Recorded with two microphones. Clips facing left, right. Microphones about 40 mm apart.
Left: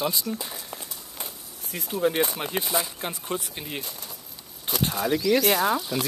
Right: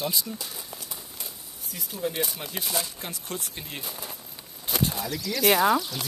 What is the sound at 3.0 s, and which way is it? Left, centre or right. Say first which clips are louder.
Speech: left 5 dB; left.